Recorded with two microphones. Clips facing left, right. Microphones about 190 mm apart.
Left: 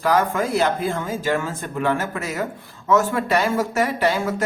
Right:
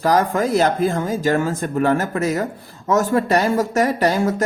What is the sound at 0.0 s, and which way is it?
Speech, 35° right (ahead or behind).